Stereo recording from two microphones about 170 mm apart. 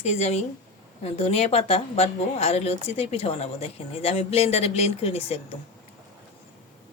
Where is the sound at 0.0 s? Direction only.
40° left (ahead or behind).